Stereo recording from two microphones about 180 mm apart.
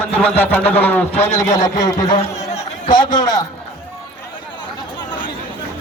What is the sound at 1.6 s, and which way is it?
A man's voice, 20° left (ahead or behind).